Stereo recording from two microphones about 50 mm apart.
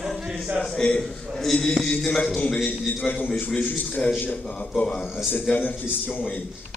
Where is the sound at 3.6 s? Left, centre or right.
Left.